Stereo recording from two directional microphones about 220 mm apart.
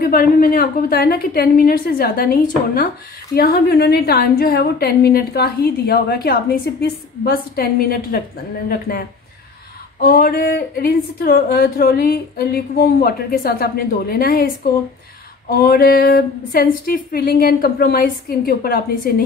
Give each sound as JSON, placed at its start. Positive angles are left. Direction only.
{"t": 0.0, "sound": "a woman's voice", "side_deg": 40}
{"t": 10.0, "sound": "a woman's voice", "side_deg": 45}
{"t": 15.5, "sound": "a woman's voice", "side_deg": 45}